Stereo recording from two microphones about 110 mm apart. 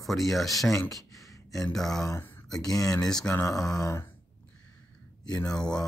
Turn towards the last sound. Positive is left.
turn(degrees=5)  # may be behind; listen again after turning